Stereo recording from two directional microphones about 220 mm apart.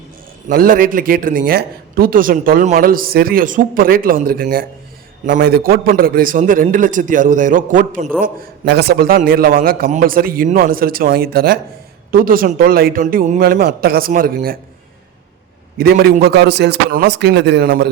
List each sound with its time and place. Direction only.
0.4 s a man's voice: 40° right (ahead or behind)
8.6 s a man's voice: 45° right (ahead or behind)
15.8 s a man's voice: 45° right (ahead or behind)